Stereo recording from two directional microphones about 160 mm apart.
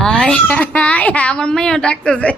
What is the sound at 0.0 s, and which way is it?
A child's voice, 5° left (ahead or behind).